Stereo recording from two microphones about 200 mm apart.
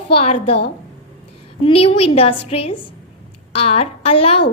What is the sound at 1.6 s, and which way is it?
A woman's voice, 25° left (ahead or behind).